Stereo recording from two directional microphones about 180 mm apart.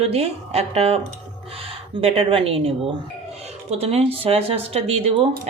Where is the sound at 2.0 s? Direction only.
30° right (ahead or behind).